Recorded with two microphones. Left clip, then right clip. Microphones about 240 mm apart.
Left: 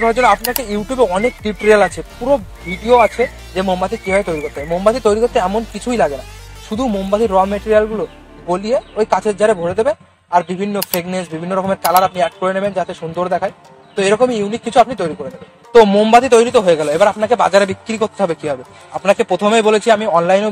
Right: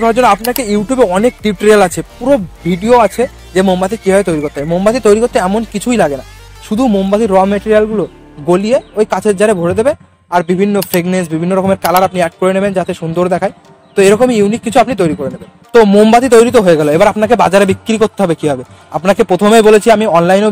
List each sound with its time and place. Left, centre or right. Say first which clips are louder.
0.0 s a man's voice: right 3 dB; right
0.4 s speech: right 5 dB; centre
0.7 s a man's voice: right 4 dB; right